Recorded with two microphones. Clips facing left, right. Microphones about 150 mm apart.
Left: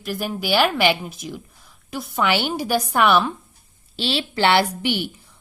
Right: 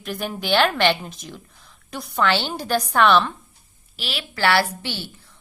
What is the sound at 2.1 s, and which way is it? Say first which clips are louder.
A woman's voice: left 1 dB; 15° left (ahead or behind).